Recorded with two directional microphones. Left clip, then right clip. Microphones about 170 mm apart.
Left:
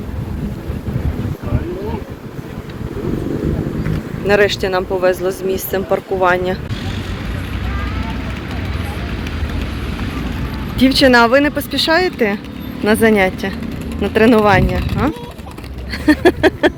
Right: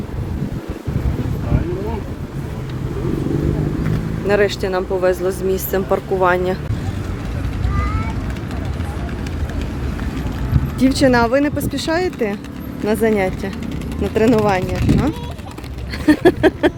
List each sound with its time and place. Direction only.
4.3 s speech: 5° right (ahead or behind)
10.8 s speech: 5° right (ahead or behind)
16.0 s a sound: 10° right (ahead or behind)